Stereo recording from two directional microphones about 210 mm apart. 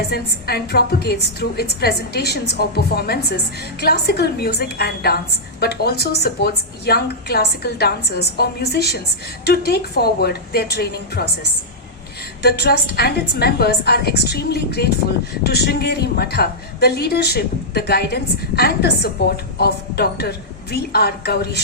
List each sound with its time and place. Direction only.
0.1 s a woman's voice: 50° left (ahead or behind)
12.4 s a woman's voice: 50° left (ahead or behind)